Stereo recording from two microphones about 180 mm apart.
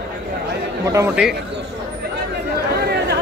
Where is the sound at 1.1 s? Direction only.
5° right (ahead or behind).